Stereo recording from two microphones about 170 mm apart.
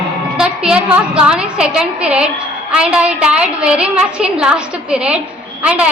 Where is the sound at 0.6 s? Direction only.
5° right (ahead or behind).